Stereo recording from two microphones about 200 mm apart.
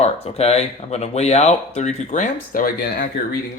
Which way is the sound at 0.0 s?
30° left (ahead or behind).